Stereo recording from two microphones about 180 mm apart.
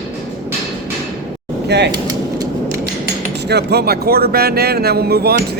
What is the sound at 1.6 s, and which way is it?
Speech, 70° right (ahead or behind).